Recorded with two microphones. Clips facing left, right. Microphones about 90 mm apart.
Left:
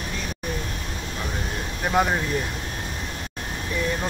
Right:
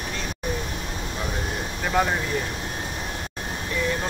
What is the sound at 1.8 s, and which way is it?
Speech, 15° left (ahead or behind).